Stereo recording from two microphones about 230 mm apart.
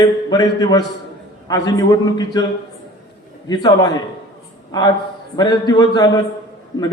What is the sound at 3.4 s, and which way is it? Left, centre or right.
Speech, centre.